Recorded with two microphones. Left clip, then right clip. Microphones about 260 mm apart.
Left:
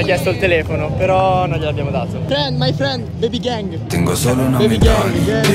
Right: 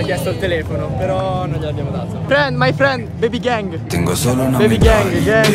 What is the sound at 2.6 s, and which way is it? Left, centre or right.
Speech, right.